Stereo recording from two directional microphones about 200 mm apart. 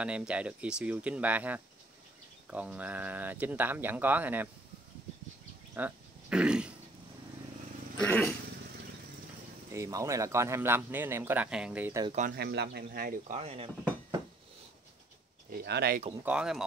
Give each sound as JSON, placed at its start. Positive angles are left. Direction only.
{"t": 0.0, "sound": "speech", "side_deg": -5}
{"t": 5.8, "sound": "a sound", "side_deg": -5}
{"t": 8.0, "sound": "speech", "side_deg": 5}
{"t": 9.7, "sound": "speech", "side_deg": -15}
{"t": 12.4, "sound": "speech", "side_deg": -55}
{"t": 13.4, "sound": "dishes", "side_deg": -30}
{"t": 15.6, "sound": "speech", "side_deg": -55}
{"t": 16.3, "sound": "speech", "side_deg": -5}